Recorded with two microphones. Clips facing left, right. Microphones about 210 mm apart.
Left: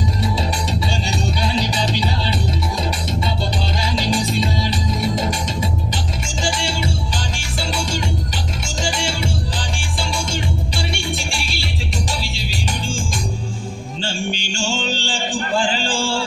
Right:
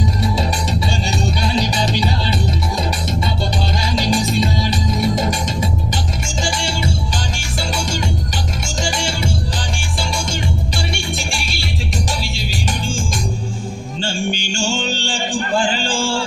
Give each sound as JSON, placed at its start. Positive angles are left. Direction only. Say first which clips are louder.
{"t": 0.4, "sound": "music", "louder": "right 2 dB", "side_deg": -45}
{"t": 3.7, "sound": "music", "louder": "right 2 dB", "side_deg": -45}